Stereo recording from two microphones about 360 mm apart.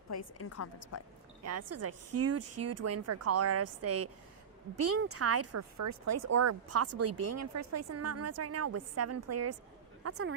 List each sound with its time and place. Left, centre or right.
0.1 s a woman's voice: left
1.5 s speech: right